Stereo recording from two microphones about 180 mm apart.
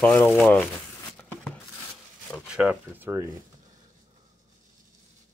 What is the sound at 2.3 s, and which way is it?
Speech, 5° right (ahead or behind).